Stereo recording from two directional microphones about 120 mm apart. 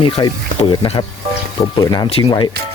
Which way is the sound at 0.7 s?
50° left (ahead or behind).